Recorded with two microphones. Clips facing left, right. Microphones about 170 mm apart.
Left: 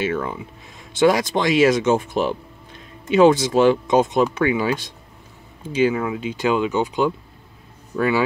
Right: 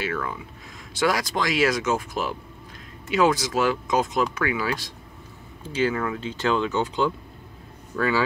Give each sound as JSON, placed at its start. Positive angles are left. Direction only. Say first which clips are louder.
{"t": 0.0, "sound": "speech", "louder": "left 5 dB", "side_deg": 25}